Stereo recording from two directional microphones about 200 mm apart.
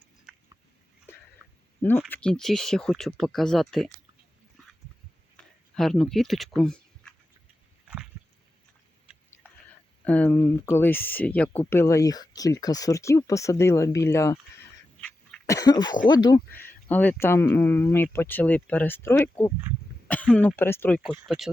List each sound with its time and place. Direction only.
2.0 s speech: 5° left (ahead or behind)
5.7 s speech: centre (ahead or behind)
10.0 s speech: 10° left (ahead or behind)
16.5 s speech: 10° left (ahead or behind)
21.0 s speech: 5° right (ahead or behind)